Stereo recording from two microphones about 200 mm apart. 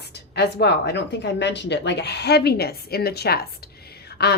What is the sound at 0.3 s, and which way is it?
A woman's voice, 55° left (ahead or behind).